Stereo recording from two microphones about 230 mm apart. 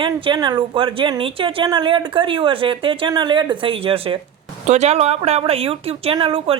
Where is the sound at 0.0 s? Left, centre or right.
Centre.